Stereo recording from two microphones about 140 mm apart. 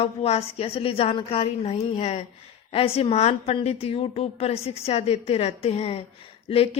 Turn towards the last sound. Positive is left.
turn(degrees=45)  # may be behind; listen again after turning